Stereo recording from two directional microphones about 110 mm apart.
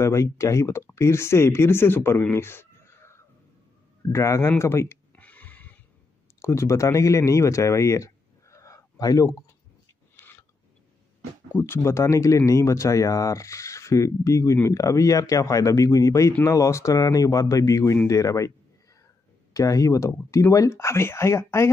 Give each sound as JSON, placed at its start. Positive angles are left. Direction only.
{"t": 0.0, "sound": "speech", "side_deg": 25}
{"t": 2.3, "sound": "a sound", "side_deg": 20}
{"t": 6.4, "sound": "speech", "side_deg": 25}
{"t": 10.2, "sound": "a sound", "side_deg": 30}
{"t": 11.5, "sound": "speech", "side_deg": 25}
{"t": 19.5, "sound": "speech", "side_deg": 30}